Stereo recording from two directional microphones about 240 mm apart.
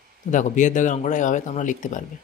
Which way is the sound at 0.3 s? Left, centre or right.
Left.